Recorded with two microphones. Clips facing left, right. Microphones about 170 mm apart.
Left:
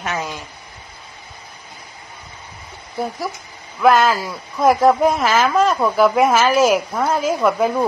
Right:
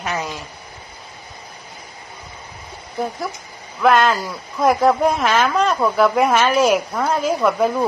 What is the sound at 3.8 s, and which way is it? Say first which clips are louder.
A woman's voice: left 1 dB; 5° left (ahead or behind).